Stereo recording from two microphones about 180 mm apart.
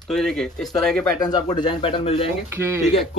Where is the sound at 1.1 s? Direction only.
20° left (ahead or behind).